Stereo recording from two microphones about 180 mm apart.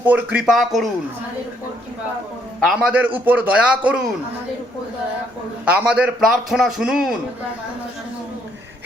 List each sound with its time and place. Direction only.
0.0 s a man's voice: 10° right (ahead or behind)
2.6 s a man's voice: centre (ahead or behind)
5.6 s a man's voice: 5° right (ahead or behind)